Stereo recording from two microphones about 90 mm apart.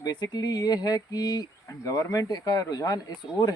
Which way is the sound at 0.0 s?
50° left (ahead or behind).